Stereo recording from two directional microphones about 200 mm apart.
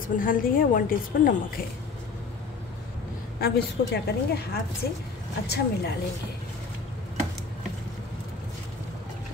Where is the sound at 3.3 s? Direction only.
50° left (ahead or behind).